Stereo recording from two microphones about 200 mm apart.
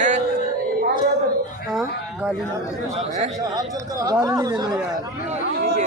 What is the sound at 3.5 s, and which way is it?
Speech, 20° right (ahead or behind).